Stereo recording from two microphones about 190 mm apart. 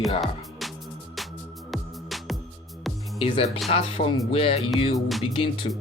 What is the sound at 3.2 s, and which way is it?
Music, 30° left (ahead or behind).